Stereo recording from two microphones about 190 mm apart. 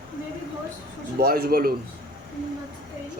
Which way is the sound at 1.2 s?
55° right (ahead or behind).